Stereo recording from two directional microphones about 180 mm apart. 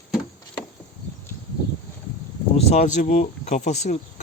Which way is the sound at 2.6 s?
40° left (ahead or behind).